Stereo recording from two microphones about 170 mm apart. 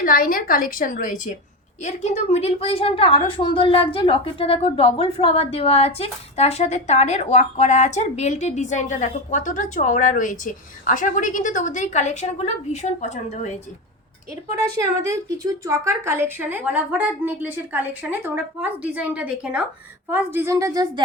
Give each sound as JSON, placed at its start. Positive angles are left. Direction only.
{"t": 0.0, "sound": "a woman's voice", "side_deg": 55}
{"t": 15.0, "sound": "a woman's voice", "side_deg": -15}